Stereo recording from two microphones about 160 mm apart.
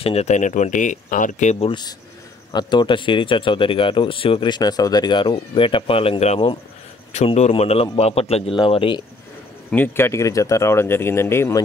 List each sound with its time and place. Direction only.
0.0 s speech: 40° left (ahead or behind)
1.7 s speech: 25° left (ahead or behind)
9.7 s speech: 15° left (ahead or behind)